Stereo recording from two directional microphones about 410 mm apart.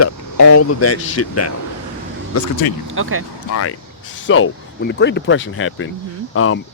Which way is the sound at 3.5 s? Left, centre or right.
Left.